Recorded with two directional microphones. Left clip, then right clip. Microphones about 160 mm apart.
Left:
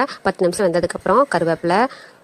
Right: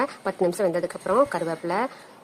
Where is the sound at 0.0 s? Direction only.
40° left (ahead or behind).